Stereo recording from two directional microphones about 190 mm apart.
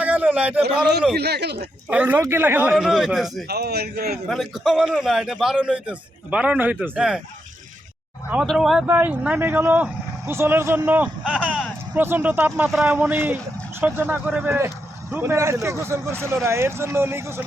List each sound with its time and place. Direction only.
0.0 s a man's voice: 10° right (ahead or behind)
1.1 s a man's voice: 60° right (ahead or behind)
1.9 s speech: 10° right (ahead or behind)
3.5 s a man's voice: 55° right (ahead or behind)
4.3 s a man's voice: centre (ahead or behind)
8.3 s a man's voice: 5° right (ahead or behind)